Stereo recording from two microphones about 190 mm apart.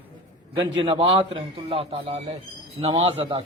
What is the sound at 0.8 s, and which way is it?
A man's voice, 25° right (ahead or behind).